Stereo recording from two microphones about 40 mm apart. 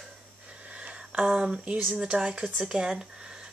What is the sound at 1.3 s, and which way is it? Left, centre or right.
Speech, centre.